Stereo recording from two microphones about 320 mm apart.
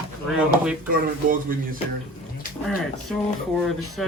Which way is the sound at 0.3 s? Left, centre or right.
Centre.